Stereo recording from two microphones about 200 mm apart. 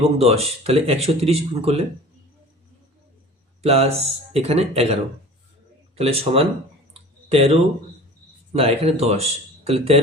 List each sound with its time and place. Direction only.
0.0 s speech: 30° right (ahead or behind)
3.6 s speech: 30° right (ahead or behind)
6.0 s speech: 30° right (ahead or behind)
6.9 s clicking: 30° right (ahead or behind)
8.5 s speech: 30° right (ahead or behind)